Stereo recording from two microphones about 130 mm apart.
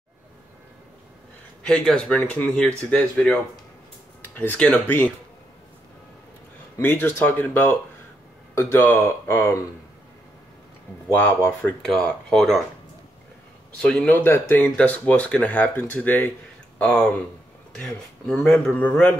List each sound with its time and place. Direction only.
1.6 s speech: 5° left (ahead or behind)
6.8 s speech: 15° left (ahead or behind)
11.1 s speech: 15° left (ahead or behind)
11.8 s speech: 5° left (ahead or behind)
13.7 s speech: 10° left (ahead or behind)